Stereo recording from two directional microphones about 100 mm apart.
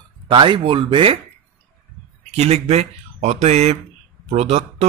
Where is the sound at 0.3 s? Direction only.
55° right (ahead or behind).